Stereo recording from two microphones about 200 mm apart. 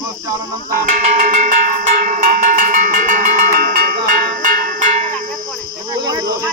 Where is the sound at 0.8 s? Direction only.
40° right (ahead or behind).